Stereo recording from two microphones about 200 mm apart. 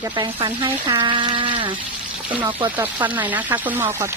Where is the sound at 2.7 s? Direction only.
10° right (ahead or behind).